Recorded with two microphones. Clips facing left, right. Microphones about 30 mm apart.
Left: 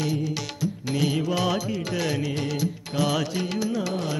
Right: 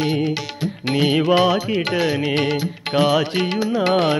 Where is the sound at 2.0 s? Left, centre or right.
Right.